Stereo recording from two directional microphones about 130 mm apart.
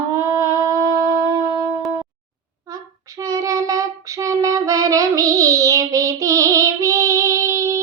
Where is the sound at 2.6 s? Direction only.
25° right (ahead or behind).